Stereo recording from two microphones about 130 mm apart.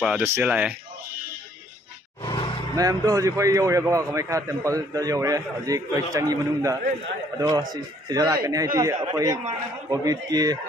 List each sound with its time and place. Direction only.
0.2 s speech: 15° right (ahead or behind)
2.2 s roar: 40° left (ahead or behind)
2.7 s a man's voice: 25° right (ahead or behind)